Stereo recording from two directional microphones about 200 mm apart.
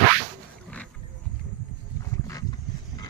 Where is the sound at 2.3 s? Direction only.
20° left (ahead or behind).